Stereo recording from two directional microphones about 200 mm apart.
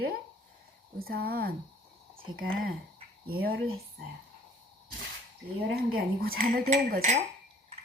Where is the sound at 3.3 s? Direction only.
50° right (ahead or behind).